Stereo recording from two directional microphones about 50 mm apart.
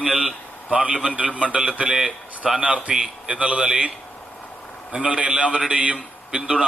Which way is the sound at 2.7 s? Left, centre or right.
Right.